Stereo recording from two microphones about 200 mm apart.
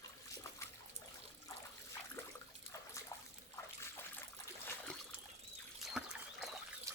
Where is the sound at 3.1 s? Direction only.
15° left (ahead or behind).